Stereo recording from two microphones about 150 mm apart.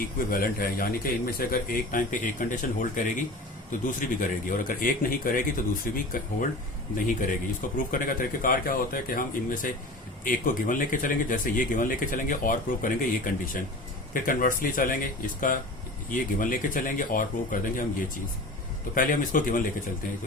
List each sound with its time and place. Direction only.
0.0 s speech: 70° left (ahead or behind)
7.9 s speech: 65° left (ahead or behind)
18.9 s speech: 65° left (ahead or behind)